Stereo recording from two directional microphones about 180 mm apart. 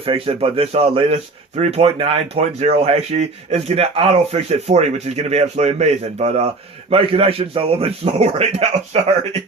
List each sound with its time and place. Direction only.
0.0 s speech: 30° right (ahead or behind)